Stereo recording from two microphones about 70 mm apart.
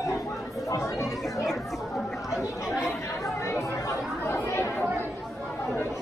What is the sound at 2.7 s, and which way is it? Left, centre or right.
Chatter, left.